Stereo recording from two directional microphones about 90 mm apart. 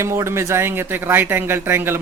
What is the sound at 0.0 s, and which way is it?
Speech, 30° right (ahead or behind).